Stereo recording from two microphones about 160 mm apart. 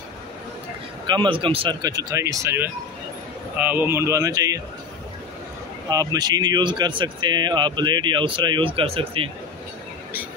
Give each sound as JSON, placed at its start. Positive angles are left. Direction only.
{"t": 1.0, "sound": "a man's voice", "side_deg": -30}
{"t": 1.8, "sound": "speech", "side_deg": -25}
{"t": 5.9, "sound": "speech", "side_deg": -25}